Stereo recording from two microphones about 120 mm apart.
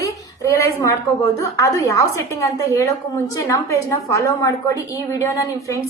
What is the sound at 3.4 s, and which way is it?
A woman's voice, 25° left (ahead or behind).